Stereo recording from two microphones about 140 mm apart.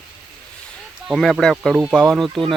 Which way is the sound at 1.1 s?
Centre (ahead or behind).